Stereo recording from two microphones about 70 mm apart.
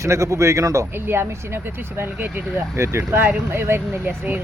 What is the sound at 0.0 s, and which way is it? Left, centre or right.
Speech, right.